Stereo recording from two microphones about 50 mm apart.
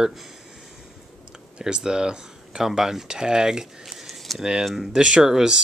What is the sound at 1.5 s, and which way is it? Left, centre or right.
Speech, centre.